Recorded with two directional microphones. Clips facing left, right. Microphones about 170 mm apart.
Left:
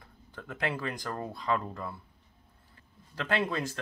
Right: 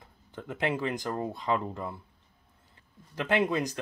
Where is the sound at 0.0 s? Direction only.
20° right (ahead or behind).